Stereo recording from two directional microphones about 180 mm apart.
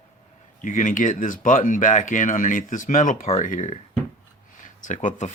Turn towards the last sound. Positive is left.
turn(degrees=45)  # may be behind; listen again after turning